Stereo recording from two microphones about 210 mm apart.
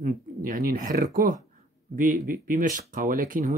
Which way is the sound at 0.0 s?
40° right (ahead or behind).